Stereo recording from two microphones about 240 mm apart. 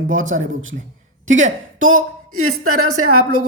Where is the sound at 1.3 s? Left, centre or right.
Right.